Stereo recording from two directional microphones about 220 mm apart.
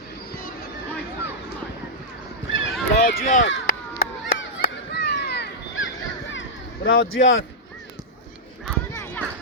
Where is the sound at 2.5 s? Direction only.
55° left (ahead or behind).